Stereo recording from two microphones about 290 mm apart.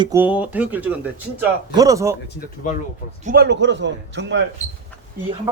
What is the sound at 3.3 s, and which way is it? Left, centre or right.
A man's voice, right.